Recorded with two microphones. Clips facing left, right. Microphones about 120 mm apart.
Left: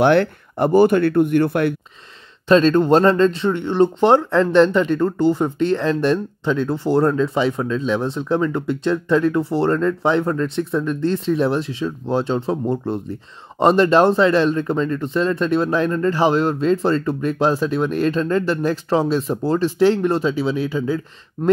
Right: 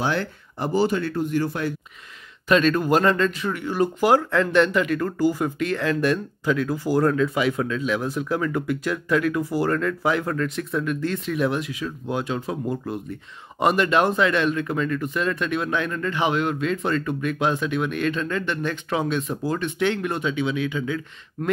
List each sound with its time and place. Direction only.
0.0 s speech: 60° left (ahead or behind)
2.4 s speech: 30° left (ahead or behind)